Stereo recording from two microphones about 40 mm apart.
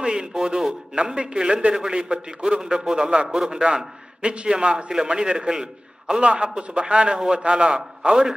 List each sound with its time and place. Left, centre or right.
0.0 s a man's voice: right